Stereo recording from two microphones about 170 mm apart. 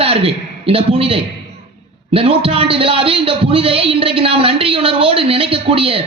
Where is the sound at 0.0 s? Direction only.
35° right (ahead or behind).